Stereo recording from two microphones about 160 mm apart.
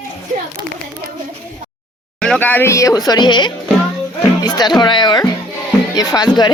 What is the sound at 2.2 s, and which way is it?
Speech, 5° left (ahead or behind).